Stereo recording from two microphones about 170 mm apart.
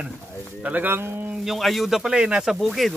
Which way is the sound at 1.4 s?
Centre (ahead or behind).